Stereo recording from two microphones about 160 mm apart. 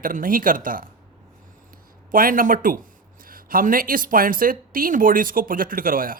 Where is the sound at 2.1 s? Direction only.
60° right (ahead or behind).